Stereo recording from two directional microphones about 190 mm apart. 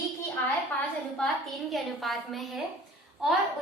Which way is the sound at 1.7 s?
Centre (ahead or behind).